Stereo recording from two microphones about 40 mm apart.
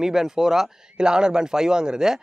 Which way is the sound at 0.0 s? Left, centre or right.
Centre.